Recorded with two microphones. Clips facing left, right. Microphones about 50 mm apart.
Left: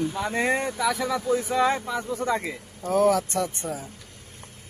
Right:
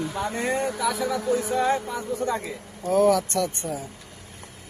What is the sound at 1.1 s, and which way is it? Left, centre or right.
Speech, left.